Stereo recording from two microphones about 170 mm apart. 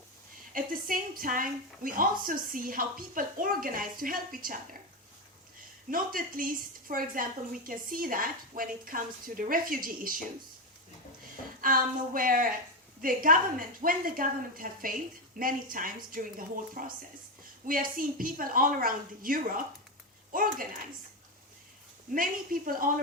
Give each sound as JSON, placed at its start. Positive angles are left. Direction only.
{"t": 0.5, "sound": "a woman's voice", "side_deg": -55}
{"t": 5.9, "sound": "a woman's voice", "side_deg": -55}
{"t": 11.6, "sound": "a woman's voice", "side_deg": -55}
{"t": 22.1, "sound": "a woman's voice", "side_deg": -55}